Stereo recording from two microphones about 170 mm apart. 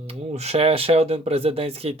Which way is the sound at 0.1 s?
40° right (ahead or behind).